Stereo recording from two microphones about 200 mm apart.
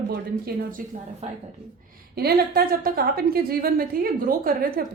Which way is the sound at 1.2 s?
35° right (ahead or behind).